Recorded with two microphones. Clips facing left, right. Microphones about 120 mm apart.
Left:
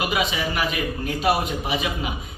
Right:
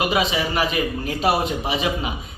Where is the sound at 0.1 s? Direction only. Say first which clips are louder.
Right 3 dB; 30° right (ahead or behind).